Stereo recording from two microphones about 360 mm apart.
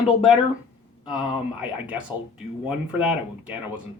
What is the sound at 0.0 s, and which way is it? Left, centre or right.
Speech, centre.